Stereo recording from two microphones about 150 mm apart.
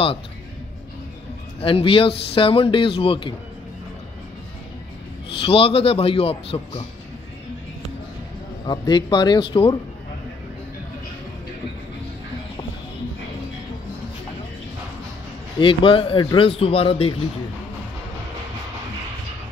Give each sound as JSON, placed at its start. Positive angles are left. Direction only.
{"t": 1.6, "sound": "speech", "side_deg": 35}
{"t": 5.4, "sound": "speech", "side_deg": 40}
{"t": 8.6, "sound": "speech", "side_deg": 30}
{"t": 15.6, "sound": "speech", "side_deg": 35}